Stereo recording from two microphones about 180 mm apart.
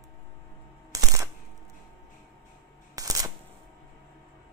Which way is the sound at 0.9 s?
20° right (ahead or behind).